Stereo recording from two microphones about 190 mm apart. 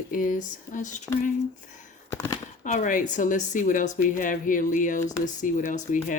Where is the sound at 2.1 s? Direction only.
15° left (ahead or behind).